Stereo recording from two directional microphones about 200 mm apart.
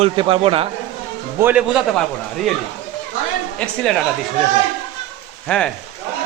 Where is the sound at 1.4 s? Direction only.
5° right (ahead or behind).